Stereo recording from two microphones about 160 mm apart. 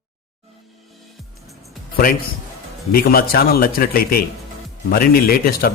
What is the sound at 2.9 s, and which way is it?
A man's voice, 65° left (ahead or behind).